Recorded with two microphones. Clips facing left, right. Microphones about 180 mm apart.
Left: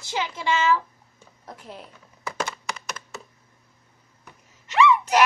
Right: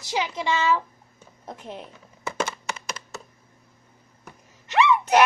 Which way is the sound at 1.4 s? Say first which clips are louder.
Right 4 dB; 20° right (ahead or behind).